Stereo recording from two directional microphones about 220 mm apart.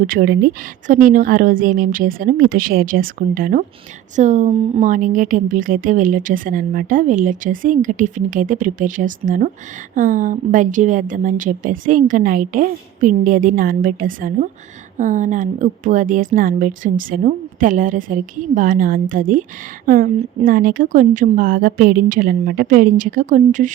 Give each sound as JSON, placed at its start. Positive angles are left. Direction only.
{"t": 0.1, "sound": "a woman's voice", "side_deg": -45}